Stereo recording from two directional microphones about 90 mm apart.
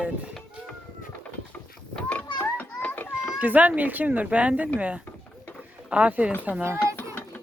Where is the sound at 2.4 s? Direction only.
20° left (ahead or behind).